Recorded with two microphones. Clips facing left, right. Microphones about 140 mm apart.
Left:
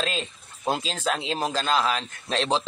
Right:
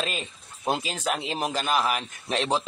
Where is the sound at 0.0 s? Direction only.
15° right (ahead or behind).